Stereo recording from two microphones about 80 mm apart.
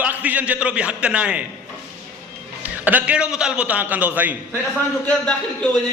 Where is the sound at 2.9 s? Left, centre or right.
Centre.